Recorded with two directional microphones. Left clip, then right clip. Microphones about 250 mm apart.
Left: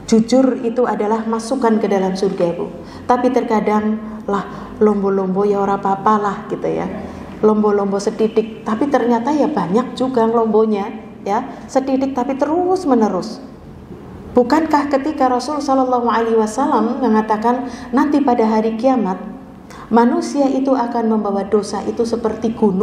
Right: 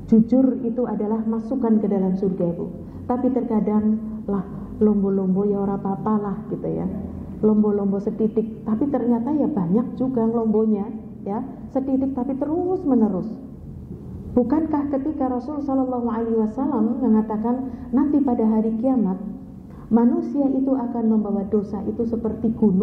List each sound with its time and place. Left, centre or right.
0.1 s a woman's voice: centre
14.3 s a woman's voice: centre
15.7 s a woman's voice: centre
21.1 s a woman's voice: left
21.4 s a woman's voice: centre